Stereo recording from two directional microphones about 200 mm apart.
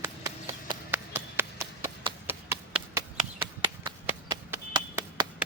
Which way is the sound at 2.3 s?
10° right (ahead or behind).